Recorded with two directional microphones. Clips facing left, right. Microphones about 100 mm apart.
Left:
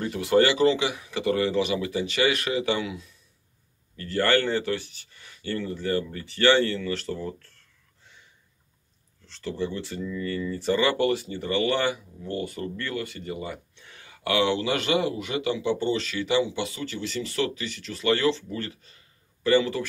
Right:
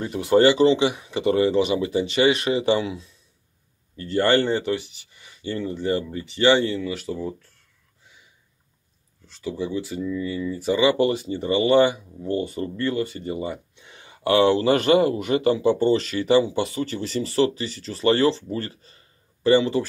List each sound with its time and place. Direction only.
0.0 s speech: 25° right (ahead or behind)